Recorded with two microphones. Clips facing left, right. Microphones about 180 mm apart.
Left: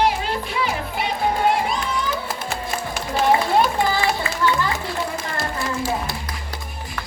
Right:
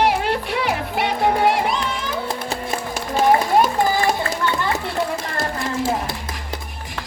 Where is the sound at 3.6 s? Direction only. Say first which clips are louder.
Right 2 dB; 45° right (ahead or behind).